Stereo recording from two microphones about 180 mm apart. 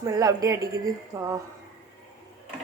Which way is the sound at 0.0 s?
20° right (ahead or behind).